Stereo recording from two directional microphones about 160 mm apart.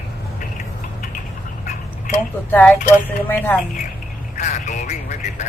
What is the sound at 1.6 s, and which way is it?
Duck, 55° left (ahead or behind).